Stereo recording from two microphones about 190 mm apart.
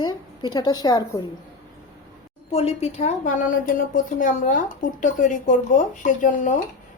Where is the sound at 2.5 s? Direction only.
30° left (ahead or behind).